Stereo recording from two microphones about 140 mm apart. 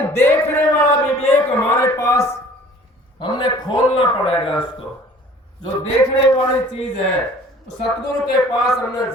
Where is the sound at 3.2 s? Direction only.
35° left (ahead or behind).